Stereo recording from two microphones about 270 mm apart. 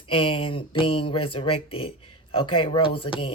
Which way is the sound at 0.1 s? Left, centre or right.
Centre.